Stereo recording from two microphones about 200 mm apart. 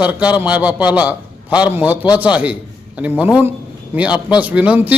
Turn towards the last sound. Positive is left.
turn(degrees=-10)  # may be behind; listen again after turning